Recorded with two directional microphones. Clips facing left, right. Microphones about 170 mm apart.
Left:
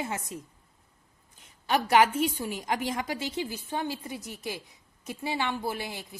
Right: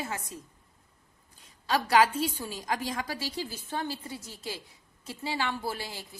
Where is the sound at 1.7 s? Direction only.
20° left (ahead or behind).